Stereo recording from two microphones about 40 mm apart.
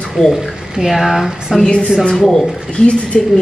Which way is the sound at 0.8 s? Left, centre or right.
Centre.